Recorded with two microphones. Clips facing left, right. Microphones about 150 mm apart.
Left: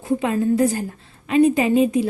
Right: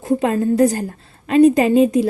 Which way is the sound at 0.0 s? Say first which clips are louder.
Right 3 dB; 40° right (ahead or behind).